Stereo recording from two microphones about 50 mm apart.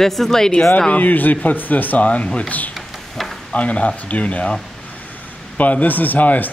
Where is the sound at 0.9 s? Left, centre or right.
Left.